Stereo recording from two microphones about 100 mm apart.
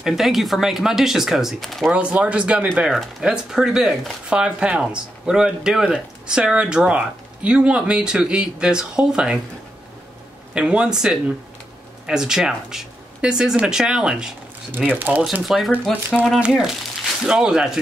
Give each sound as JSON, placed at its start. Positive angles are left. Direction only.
{"t": 0.0, "sound": "speech", "side_deg": -5}
{"t": 1.9, "sound": "speech", "side_deg": -15}
{"t": 10.5, "sound": "speech", "side_deg": -10}
{"t": 14.8, "sound": "speech", "side_deg": -15}
{"t": 15.4, "sound": "speech", "side_deg": -5}